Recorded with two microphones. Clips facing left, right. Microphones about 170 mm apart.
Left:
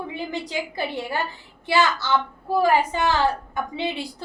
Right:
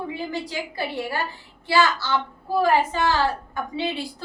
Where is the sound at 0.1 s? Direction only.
20° left (ahead or behind).